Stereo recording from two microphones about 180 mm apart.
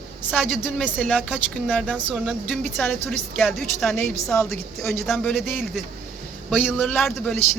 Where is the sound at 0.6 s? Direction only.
5° left (ahead or behind).